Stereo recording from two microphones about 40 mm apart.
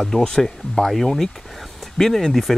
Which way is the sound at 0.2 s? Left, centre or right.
Centre.